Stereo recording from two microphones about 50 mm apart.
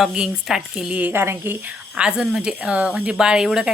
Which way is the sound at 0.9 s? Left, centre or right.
Right.